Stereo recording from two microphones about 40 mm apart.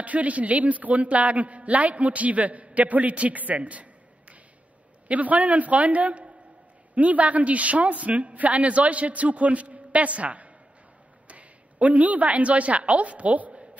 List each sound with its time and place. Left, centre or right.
0.0 s a man's voice: right